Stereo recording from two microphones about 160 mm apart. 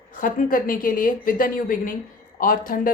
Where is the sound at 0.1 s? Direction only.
55° left (ahead or behind).